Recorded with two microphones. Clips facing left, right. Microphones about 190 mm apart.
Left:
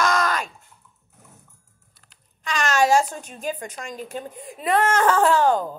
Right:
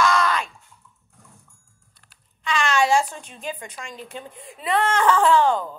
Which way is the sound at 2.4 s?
40° left (ahead or behind).